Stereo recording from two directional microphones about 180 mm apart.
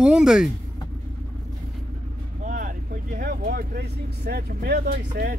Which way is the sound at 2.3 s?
50° right (ahead or behind).